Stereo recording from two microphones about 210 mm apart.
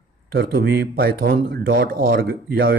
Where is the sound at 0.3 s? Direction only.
50° right (ahead or behind).